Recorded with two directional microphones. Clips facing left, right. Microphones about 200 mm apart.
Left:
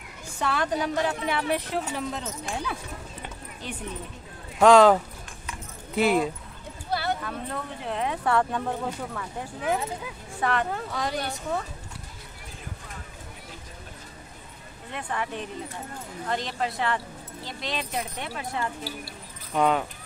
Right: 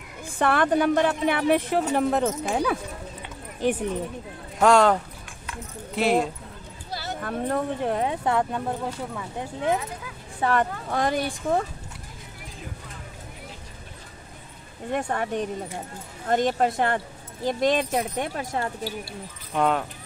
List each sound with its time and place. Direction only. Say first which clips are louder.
0.2 s a woman's voice: right 6 dB; 55° right (ahead or behind)
4.6 s speech: left 2 dB; centre (ahead or behind)
6.9 s a sound: left 6 dB; 60° left (ahead or behind)
7.2 s speech: right 7 dB; 50° right (ahead or behind)
8.1 s speech: right 1 dB; 25° right (ahead or behind)
8.4 s speech: even; 10° right (ahead or behind)
10.4 s speech: right 3 dB; 45° right (ahead or behind)
14.9 s speech: right 6 dB; 45° right (ahead or behind)
19.5 s speech: even; centre (ahead or behind)